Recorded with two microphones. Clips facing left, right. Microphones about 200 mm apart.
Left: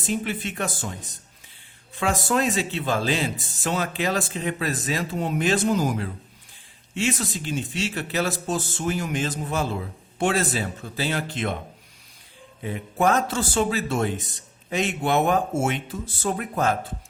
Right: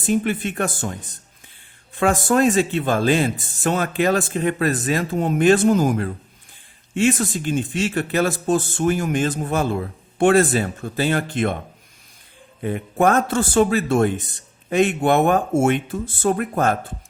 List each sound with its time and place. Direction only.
0.1 s speech: 50° right (ahead or behind)
2.0 s speech: 50° right (ahead or behind)
12.6 s speech: 55° right (ahead or behind)